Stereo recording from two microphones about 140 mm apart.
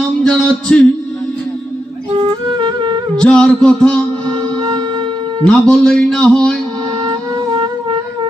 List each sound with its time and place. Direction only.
0.3 s a sound: 5° left (ahead or behind)
2.1 s music: 35° right (ahead or behind)
3.2 s speech: 5° left (ahead or behind)
4.3 s music: 30° right (ahead or behind)
5.5 s speech: 5° left (ahead or behind)
7.0 s wind instrument: 35° right (ahead or behind)